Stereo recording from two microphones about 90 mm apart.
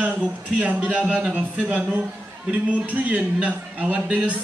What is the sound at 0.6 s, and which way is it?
A man's voice, 15° right (ahead or behind).